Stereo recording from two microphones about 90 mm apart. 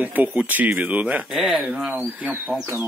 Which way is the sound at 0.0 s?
20° right (ahead or behind).